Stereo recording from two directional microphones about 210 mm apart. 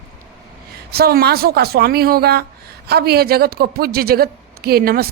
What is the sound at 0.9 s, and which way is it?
Speech, 50° right (ahead or behind).